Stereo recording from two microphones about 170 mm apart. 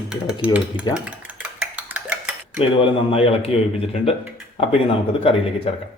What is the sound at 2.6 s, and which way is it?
A man's voice, 30° left (ahead or behind).